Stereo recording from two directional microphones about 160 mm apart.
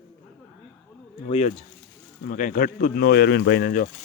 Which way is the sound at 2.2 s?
55° left (ahead or behind).